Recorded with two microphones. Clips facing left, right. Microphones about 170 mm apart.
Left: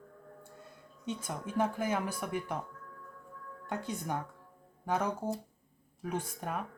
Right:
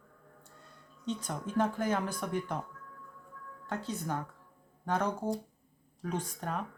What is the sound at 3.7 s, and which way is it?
Speech, 15° left (ahead or behind).